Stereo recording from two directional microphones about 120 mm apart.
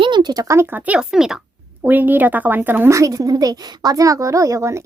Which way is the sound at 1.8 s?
15° right (ahead or behind).